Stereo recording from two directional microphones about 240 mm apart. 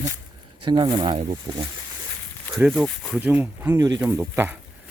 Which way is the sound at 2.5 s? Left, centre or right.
Centre.